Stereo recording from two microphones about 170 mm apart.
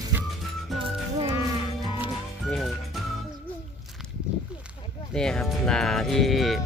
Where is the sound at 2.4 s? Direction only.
Centre (ahead or behind).